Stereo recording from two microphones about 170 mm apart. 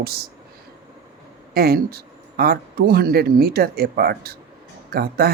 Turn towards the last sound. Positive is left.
turn(degrees=-65)  # may be behind; listen again after turning